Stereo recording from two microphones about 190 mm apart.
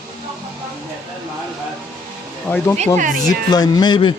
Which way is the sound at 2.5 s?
10° left (ahead or behind).